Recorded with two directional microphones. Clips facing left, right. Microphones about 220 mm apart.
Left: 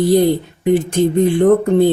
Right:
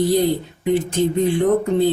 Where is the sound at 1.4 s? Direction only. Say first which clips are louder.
Left 6 dB; 55° left (ahead or behind).